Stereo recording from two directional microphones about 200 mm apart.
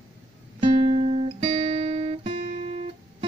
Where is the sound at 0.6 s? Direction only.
30° right (ahead or behind).